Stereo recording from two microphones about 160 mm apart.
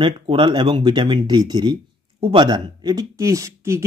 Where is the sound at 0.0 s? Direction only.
30° right (ahead or behind).